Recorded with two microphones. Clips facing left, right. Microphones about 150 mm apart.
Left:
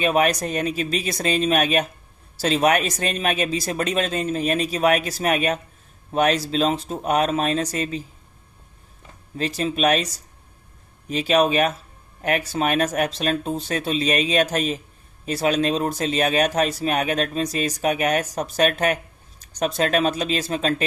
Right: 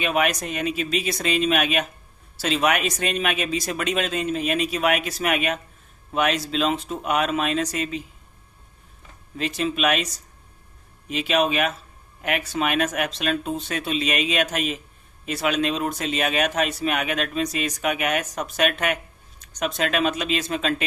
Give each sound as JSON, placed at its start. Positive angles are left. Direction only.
{"t": 0.0, "sound": "speech", "side_deg": 35}
{"t": 9.4, "sound": "speech", "side_deg": 35}
{"t": 11.1, "sound": "speech", "side_deg": 40}